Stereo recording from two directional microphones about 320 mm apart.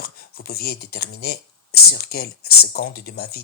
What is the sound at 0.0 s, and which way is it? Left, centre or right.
Speech, left.